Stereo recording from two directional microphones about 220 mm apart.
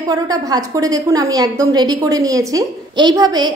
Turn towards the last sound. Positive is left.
turn(degrees=-20)  # may be behind; listen again after turning